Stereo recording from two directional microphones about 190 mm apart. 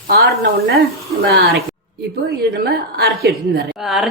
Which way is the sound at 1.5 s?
55° right (ahead or behind).